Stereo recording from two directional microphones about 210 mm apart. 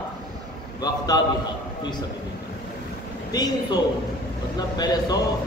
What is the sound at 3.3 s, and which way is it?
A man's voice, 20° left (ahead or behind).